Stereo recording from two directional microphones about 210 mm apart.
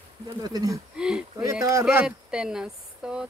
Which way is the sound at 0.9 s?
5° right (ahead or behind).